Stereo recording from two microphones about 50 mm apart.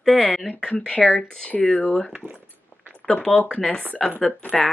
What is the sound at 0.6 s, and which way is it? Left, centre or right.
Speech, centre.